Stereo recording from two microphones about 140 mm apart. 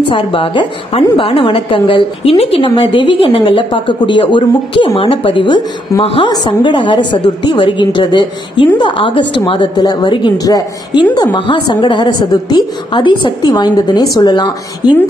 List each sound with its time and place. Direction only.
0.1 s a woman's voice: 40° left (ahead or behind)